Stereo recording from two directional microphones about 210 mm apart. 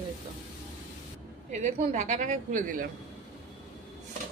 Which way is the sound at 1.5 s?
35° right (ahead or behind).